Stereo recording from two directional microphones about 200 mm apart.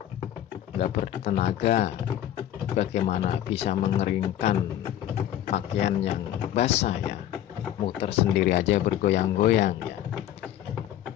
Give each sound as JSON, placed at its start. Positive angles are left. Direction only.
{"t": 0.7, "sound": "speech", "side_deg": 30}